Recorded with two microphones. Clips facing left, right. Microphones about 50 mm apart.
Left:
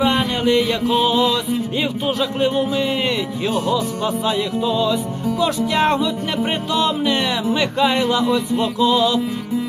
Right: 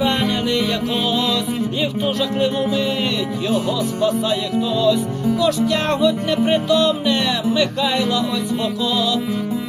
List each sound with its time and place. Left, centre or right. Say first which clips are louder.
0.0 s music: left 1 dB; centre
0.9 s music: left 4 dB; centre
1.1 s music: left 3 dB; left
2.4 s music: left 1 dB; left
5.8 s music: left 1 dB; centre
6.4 s music: right 4 dB; left